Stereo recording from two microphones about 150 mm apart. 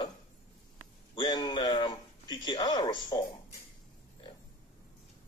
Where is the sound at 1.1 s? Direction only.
25° left (ahead or behind).